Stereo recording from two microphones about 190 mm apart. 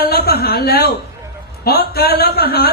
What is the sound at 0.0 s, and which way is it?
A man's voice, 55° left (ahead or behind).